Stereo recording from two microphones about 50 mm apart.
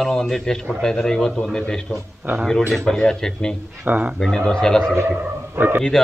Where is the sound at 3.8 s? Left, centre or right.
Right.